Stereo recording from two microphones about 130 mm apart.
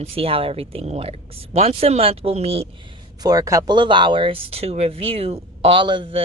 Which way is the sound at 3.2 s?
30° right (ahead or behind).